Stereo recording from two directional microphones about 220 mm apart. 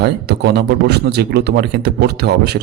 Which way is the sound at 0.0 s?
50° right (ahead or behind).